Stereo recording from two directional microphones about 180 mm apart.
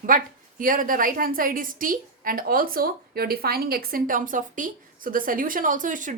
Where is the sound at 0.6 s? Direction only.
50° right (ahead or behind).